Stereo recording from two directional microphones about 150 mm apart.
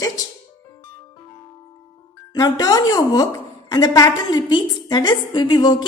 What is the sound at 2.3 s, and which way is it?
A woman's voice, 25° left (ahead or behind).